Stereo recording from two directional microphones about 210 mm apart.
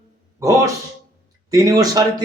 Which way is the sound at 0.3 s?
15° right (ahead or behind).